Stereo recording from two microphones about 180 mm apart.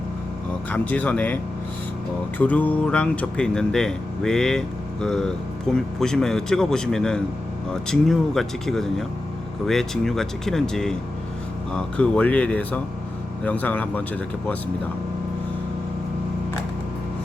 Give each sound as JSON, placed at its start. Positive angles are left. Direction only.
{"t": 0.7, "sound": "speech", "side_deg": 10}
{"t": 2.4, "sound": "speech", "side_deg": 10}